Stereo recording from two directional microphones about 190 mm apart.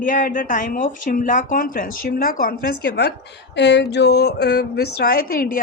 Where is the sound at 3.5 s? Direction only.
65° left (ahead or behind).